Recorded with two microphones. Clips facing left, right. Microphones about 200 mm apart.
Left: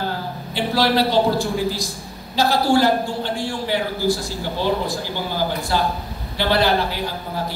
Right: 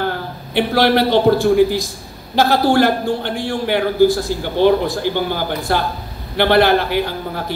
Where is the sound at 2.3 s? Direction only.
55° right (ahead or behind).